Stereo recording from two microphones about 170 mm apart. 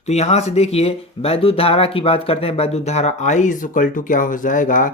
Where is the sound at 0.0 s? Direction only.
40° left (ahead or behind).